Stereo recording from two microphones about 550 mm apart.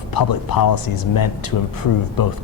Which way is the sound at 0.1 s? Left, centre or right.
Left.